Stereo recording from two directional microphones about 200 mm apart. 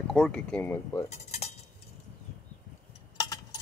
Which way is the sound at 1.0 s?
35° left (ahead or behind).